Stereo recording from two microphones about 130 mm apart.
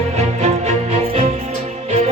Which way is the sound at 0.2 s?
60° right (ahead or behind).